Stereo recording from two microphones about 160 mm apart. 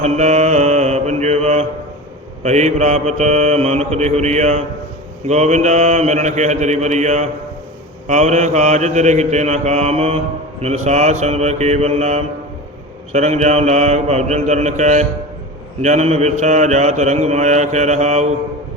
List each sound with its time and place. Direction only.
0.0 s mantra: 45° right (ahead or behind)